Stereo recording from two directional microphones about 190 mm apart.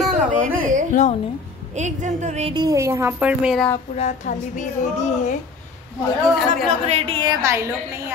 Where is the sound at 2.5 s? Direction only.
20° right (ahead or behind).